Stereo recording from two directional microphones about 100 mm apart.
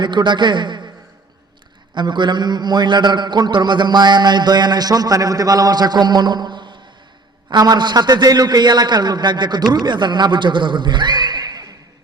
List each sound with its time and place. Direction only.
0.0 s a man's voice: 50° right (ahead or behind)
2.0 s a man's voice: 50° right (ahead or behind)